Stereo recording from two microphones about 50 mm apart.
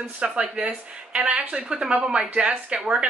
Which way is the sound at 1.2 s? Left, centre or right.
Right.